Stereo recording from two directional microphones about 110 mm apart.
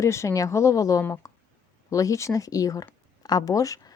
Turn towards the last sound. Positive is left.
turn(degrees=30)  # may be behind; listen again after turning